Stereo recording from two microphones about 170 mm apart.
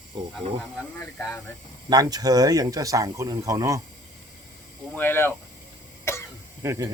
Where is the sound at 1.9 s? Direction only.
20° right (ahead or behind).